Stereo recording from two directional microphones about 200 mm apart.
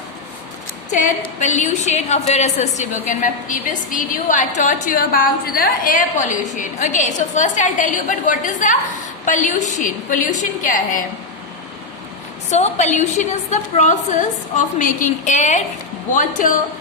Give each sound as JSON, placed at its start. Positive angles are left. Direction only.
{"t": 0.9, "sound": "a woman's voice", "side_deg": 40}
{"t": 12.5, "sound": "a woman's voice", "side_deg": 35}